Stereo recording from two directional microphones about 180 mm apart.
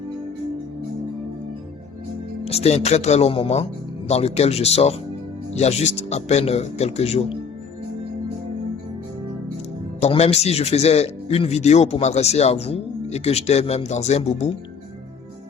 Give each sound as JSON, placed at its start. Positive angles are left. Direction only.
{"t": 2.4, "sound": "speech", "side_deg": 35}
{"t": 10.0, "sound": "speech", "side_deg": 35}